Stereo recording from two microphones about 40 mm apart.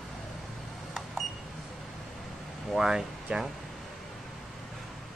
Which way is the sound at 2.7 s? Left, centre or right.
Centre.